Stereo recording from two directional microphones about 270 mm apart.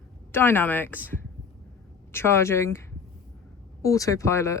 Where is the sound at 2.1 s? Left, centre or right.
Centre.